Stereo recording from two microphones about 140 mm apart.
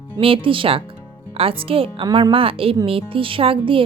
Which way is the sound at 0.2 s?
40° right (ahead or behind).